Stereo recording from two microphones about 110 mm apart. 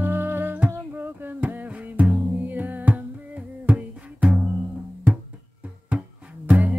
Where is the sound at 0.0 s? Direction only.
20° right (ahead or behind).